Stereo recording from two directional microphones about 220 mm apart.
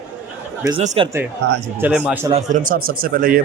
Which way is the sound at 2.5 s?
40° right (ahead or behind).